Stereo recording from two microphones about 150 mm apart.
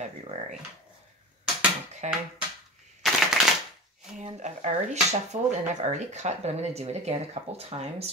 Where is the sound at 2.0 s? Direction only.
50° right (ahead or behind).